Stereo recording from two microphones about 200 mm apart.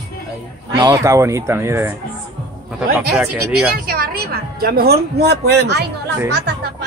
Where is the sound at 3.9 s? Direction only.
50° right (ahead or behind).